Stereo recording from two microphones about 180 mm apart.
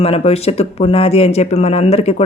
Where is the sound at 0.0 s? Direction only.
35° left (ahead or behind).